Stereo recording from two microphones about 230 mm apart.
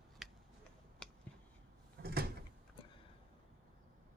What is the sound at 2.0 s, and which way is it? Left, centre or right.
Door, right.